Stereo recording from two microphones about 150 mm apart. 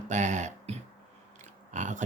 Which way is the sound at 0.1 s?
55° right (ahead or behind).